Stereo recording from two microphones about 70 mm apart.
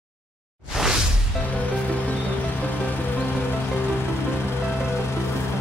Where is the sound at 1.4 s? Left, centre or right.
Left.